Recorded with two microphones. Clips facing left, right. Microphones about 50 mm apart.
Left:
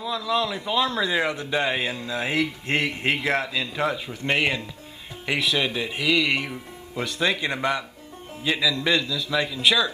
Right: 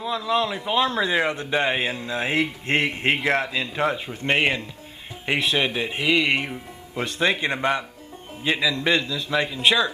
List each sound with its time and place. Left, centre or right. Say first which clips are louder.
0.0 s a man's voice: right 2 dB; right